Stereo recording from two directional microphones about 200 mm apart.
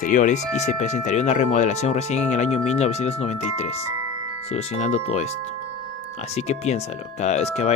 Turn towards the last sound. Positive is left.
turn(degrees=35)  # may be behind; listen again after turning